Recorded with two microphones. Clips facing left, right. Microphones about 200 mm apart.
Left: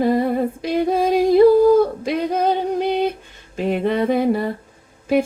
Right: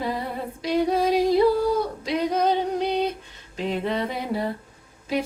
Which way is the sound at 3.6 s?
55° left (ahead or behind).